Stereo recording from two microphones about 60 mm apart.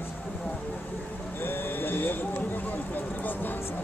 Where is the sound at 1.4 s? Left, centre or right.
Left.